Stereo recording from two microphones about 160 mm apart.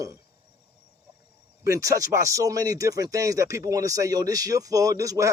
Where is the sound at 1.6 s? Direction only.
20° right (ahead or behind).